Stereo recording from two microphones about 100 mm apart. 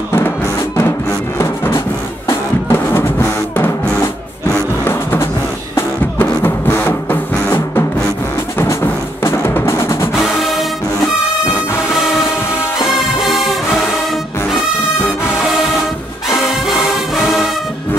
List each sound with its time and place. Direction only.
1.4 s music: 25° left (ahead or behind)
4.8 s music: 20° left (ahead or behind)
9.2 s music: 25° left (ahead or behind)
10.1 s music: centre (ahead or behind)
13.2 s music: centre (ahead or behind)
17.2 s music: centre (ahead or behind)